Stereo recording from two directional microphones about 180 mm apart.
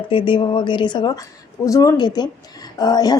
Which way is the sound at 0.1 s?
30° left (ahead or behind).